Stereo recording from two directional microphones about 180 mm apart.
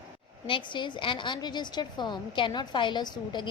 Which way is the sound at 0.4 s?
25° left (ahead or behind).